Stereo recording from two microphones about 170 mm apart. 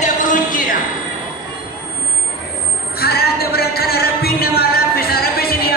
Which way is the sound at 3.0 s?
65° left (ahead or behind).